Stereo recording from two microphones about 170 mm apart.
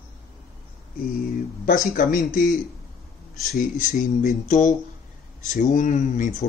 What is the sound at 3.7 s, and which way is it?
Speech, 45° left (ahead or behind).